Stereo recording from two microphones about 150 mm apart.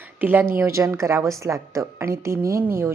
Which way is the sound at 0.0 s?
10° right (ahead or behind).